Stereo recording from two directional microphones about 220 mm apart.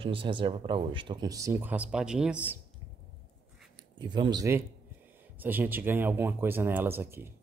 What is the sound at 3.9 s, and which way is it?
Speech, 20° right (ahead or behind).